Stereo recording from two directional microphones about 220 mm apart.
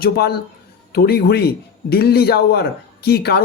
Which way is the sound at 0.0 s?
45° left (ahead or behind).